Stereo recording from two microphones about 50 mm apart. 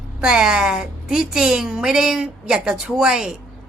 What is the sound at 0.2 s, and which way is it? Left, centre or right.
A woman's voice, centre.